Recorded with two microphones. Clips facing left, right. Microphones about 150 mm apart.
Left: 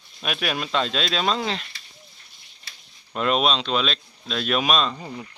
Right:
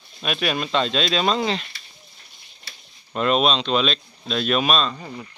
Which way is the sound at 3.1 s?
5° left (ahead or behind).